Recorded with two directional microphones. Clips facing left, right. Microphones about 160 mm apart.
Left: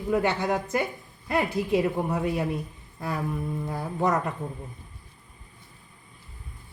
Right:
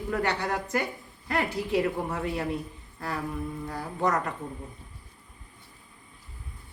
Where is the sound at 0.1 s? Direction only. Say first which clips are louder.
Left 4 dB; 20° left (ahead or behind).